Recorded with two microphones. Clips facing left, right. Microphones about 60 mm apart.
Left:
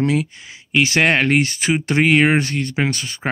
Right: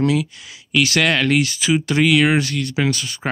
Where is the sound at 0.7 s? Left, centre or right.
Left.